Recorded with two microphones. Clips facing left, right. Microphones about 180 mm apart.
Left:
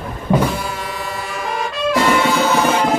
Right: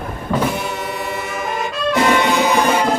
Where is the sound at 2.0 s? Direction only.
15° right (ahead or behind).